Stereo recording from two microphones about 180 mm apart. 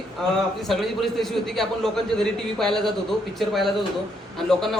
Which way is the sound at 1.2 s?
Centre (ahead or behind).